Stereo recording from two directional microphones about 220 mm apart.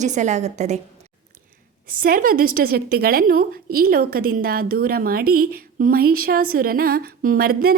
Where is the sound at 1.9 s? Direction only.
40° right (ahead or behind).